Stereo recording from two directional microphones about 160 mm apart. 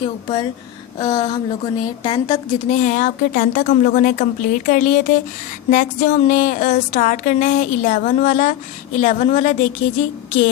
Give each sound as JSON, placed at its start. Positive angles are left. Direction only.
{"t": 0.0, "sound": "a woman's voice", "side_deg": 35}